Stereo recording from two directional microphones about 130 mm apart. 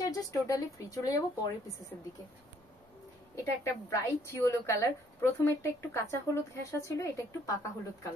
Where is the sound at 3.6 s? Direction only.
20° left (ahead or behind).